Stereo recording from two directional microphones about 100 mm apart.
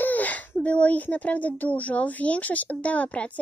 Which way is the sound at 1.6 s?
15° left (ahead or behind).